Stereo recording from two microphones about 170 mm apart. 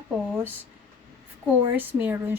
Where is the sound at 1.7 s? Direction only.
10° right (ahead or behind).